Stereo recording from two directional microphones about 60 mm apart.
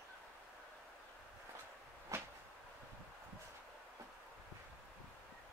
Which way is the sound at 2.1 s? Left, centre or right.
Right.